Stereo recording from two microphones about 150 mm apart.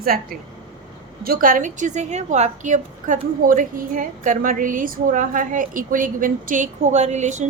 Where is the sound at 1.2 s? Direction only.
70° right (ahead or behind).